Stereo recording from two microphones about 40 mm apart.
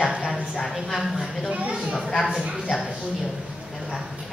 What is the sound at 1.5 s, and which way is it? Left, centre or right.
Speech, right.